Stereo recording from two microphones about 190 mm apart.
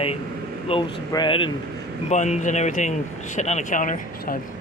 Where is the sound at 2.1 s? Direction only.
40° left (ahead or behind).